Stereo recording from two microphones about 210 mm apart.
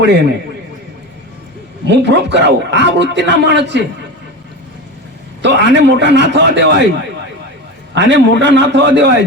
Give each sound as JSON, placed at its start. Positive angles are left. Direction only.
{"t": 1.9, "sound": "a man's voice", "side_deg": -55}
{"t": 5.4, "sound": "a man's voice", "side_deg": -55}
{"t": 7.9, "sound": "a man's voice", "side_deg": -55}